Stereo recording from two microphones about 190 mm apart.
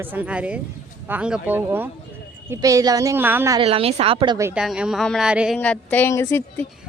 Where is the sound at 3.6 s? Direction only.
30° right (ahead or behind).